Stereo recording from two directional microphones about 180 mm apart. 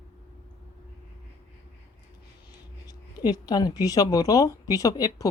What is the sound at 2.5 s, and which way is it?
Speech, 20° left (ahead or behind).